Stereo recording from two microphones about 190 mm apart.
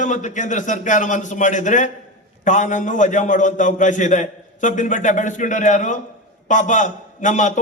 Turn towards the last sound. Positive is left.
turn(degrees=40)  # may be behind; listen again after turning